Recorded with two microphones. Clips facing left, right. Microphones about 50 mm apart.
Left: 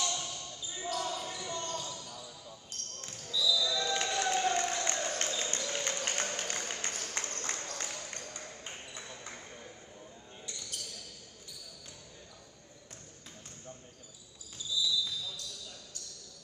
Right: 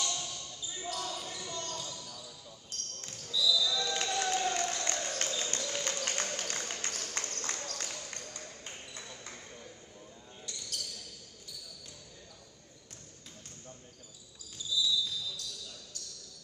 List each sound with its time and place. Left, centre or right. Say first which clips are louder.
0.0 s basketball bounce: left 1 dB; left
10.7 s basketball bounce: right 3 dB; left
14.7 s basketball bounce: right 1 dB; left